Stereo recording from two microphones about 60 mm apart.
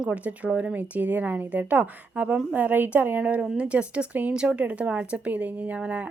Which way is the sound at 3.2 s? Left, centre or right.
Centre.